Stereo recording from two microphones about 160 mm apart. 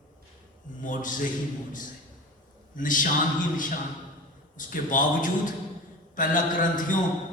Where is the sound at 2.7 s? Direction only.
55° left (ahead or behind).